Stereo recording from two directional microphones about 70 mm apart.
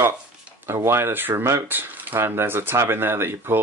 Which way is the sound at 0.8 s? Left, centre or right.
Right.